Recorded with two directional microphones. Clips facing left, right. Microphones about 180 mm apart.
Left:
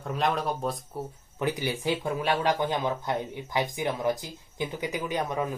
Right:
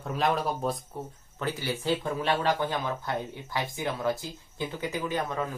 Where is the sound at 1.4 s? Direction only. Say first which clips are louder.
Left 3 dB; 15° left (ahead or behind).